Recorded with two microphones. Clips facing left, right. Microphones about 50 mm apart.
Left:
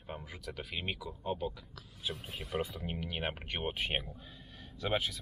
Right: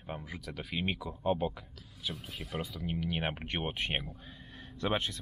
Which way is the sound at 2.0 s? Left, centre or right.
Centre.